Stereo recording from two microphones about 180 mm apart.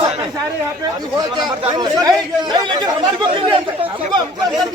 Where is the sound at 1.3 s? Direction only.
25° right (ahead or behind).